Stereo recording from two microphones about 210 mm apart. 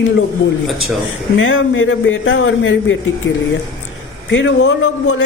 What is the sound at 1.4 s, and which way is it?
A man's voice, 65° left (ahead or behind).